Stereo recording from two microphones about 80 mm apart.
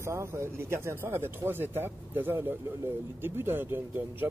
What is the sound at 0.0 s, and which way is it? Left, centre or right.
Speech, right.